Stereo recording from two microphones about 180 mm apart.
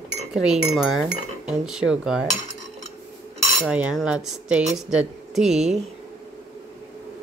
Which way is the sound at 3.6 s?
Centre (ahead or behind).